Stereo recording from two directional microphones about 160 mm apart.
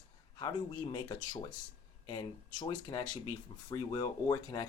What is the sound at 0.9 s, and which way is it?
Speech, 25° left (ahead or behind).